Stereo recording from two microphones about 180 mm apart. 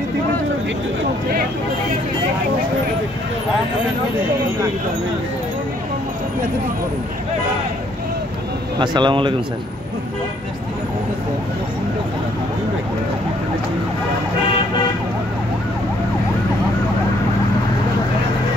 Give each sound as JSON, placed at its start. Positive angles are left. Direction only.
{"t": 8.7, "sound": "a man's voice", "side_deg": -25}